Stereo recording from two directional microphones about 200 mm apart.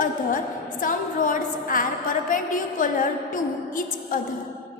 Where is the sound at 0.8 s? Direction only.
40° left (ahead or behind).